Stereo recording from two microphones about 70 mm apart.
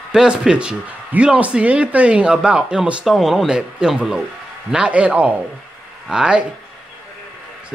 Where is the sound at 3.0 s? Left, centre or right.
Centre.